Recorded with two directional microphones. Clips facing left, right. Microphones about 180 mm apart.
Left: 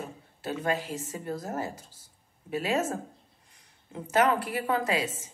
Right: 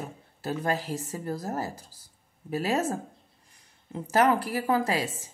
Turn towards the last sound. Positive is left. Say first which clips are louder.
# right 2 dB
turn(degrees=-35)  # may be behind; listen again after turning